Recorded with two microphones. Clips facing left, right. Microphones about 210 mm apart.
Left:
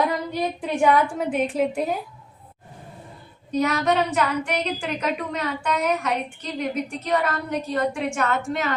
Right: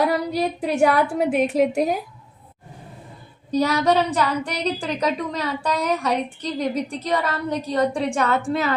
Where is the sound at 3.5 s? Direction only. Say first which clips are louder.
Right 3 dB; 35° right (ahead or behind).